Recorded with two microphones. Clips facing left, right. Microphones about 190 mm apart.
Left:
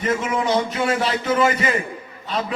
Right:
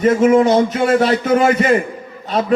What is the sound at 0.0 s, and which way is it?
A man's voice, 45° right (ahead or behind).